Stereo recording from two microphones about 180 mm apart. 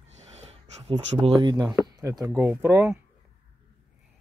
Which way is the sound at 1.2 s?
25° right (ahead or behind).